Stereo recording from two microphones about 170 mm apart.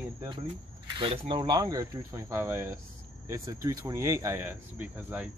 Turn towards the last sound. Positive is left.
turn(degrees=-10)  # may be behind; listen again after turning